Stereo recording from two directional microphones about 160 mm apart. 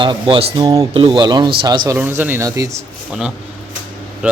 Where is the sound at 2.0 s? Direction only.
10° right (ahead or behind).